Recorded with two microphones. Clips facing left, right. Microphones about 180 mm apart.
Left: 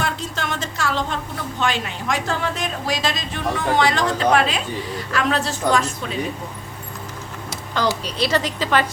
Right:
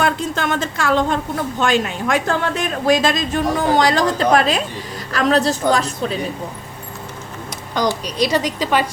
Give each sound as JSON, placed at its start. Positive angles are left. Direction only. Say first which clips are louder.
{"t": 0.0, "sound": "a woman's voice", "louder": "right 6 dB", "side_deg": -55}
{"t": 7.7, "sound": "a woman's voice", "louder": "right 2 dB", "side_deg": -15}